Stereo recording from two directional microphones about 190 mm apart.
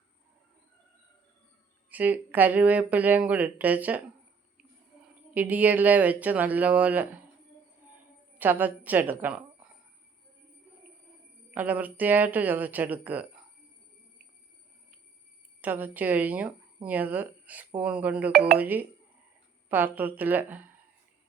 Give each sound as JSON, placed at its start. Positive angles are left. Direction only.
{"t": 1.9, "sound": "speech", "side_deg": -10}
{"t": 5.3, "sound": "speech", "side_deg": -10}
{"t": 8.4, "sound": "a woman's voice", "side_deg": -10}
{"t": 11.5, "sound": "speech", "side_deg": -10}
{"t": 15.6, "sound": "speech", "side_deg": -10}